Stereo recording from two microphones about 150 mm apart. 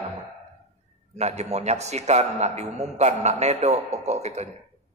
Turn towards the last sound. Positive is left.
turn(degrees=-50)  # may be behind; listen again after turning